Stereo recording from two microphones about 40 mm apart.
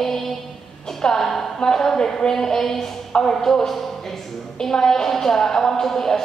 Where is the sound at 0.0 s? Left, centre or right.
Centre.